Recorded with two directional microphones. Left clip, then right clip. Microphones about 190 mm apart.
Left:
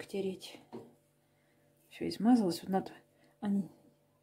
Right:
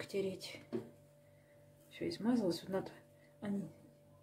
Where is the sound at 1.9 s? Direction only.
55° left (ahead or behind).